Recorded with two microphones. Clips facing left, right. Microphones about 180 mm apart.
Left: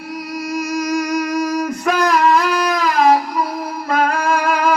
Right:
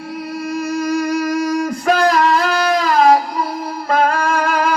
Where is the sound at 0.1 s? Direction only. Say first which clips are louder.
Even; 30° right (ahead or behind).